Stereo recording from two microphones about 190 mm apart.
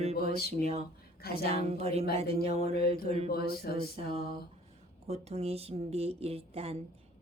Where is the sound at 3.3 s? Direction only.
55° left (ahead or behind).